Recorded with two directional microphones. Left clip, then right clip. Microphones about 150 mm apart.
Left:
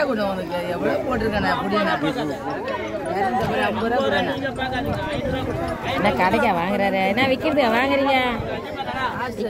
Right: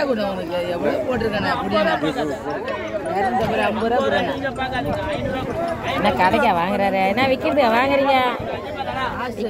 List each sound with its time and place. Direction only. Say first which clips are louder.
3.5 s speech: right 2 dB; 20° right (ahead or behind)
5.9 s speech: right 2 dB; 5° right (ahead or behind)